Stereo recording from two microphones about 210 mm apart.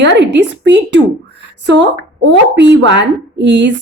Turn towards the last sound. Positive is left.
turn(degrees=-55)  # may be behind; listen again after turning